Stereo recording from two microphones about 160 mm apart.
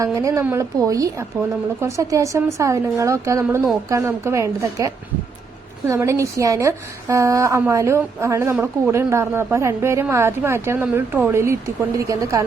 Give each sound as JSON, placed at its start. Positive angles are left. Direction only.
{"t": 0.0, "sound": "a woman's voice", "side_deg": -20}